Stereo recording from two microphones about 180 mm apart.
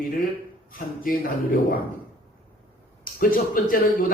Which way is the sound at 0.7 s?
50° left (ahead or behind).